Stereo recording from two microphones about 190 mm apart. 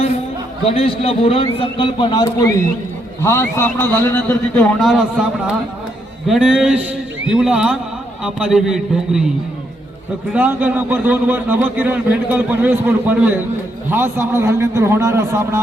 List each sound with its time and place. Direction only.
0.6 s a man's voice: 30° left (ahead or behind); by 5.2 s centre (ahead or behind)
6.2 s a man's voice: centre (ahead or behind)
10.3 s a man's voice: 10° right (ahead or behind)